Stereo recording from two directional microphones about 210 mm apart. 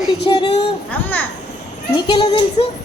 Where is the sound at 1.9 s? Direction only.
20° left (ahead or behind).